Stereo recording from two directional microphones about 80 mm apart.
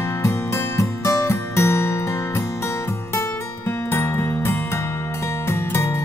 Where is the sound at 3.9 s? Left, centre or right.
Left.